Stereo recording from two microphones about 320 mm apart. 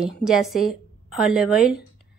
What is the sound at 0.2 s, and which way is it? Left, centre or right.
A woman's voice, centre.